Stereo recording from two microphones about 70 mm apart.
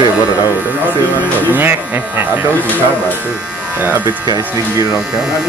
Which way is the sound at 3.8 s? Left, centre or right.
Right.